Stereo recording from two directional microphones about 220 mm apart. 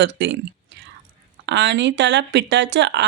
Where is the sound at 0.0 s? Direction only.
55° right (ahead or behind).